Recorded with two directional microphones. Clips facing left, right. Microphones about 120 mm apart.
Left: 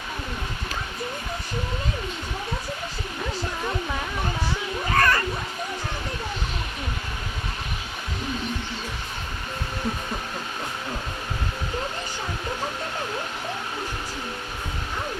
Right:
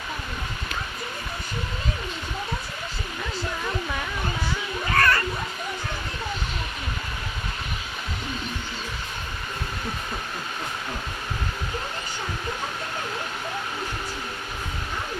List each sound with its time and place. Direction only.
4.9 s cat: 15° left (ahead or behind)